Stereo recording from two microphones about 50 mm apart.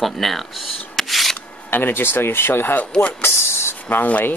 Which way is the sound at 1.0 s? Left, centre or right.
Centre.